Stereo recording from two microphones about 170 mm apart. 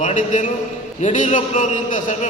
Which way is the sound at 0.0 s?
45° left (ahead or behind).